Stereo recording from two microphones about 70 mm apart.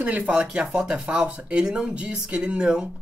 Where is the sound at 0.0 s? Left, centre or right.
Right.